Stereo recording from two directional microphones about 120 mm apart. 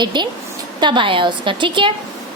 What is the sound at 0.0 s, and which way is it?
A woman's voice, 40° right (ahead or behind).